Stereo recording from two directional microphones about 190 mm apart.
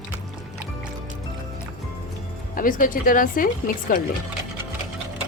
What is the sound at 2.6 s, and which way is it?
A woman's voice, 45° left (ahead or behind).